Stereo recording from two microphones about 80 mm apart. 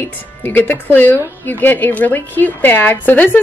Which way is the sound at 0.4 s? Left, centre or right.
Left.